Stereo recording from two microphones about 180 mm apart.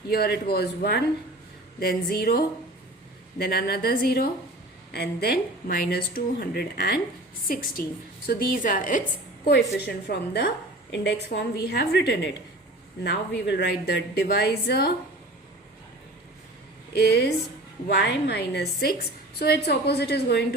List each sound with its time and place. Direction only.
0.1 s speech: 60° left (ahead or behind)
8.3 s a woman's voice: 50° left (ahead or behind)
9.5 s a woman's voice: 65° left (ahead or behind)
17.0 s a woman's voice: 65° left (ahead or behind)